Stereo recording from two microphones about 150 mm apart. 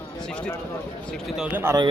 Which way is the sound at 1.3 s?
10° right (ahead or behind).